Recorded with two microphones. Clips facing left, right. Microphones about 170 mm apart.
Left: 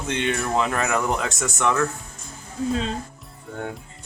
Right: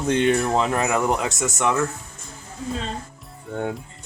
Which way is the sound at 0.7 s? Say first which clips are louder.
Right 2 dB; 15° right (ahead or behind).